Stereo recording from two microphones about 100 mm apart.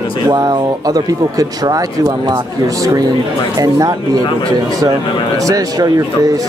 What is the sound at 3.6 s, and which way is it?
Speech, 40° right (ahead or behind).